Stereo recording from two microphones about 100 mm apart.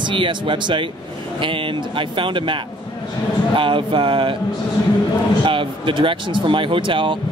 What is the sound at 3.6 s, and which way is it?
Speech, 55° right (ahead or behind).